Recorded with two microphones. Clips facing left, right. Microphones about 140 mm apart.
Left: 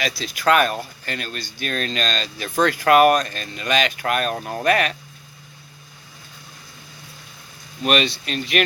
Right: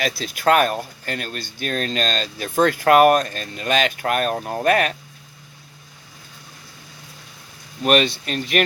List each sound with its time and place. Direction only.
0.0 s speech: 50° right (ahead or behind)
7.9 s speech: 50° right (ahead or behind)